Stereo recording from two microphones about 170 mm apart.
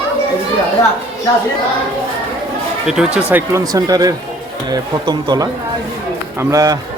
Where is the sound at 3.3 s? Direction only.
15° right (ahead or behind).